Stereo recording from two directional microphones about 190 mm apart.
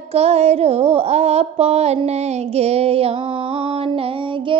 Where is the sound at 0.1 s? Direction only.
35° right (ahead or behind).